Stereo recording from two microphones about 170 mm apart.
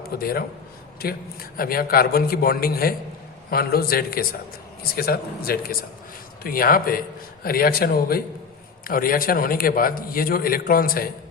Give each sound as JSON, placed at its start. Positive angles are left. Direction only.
{"t": 0.1, "sound": "a man's voice", "side_deg": 65}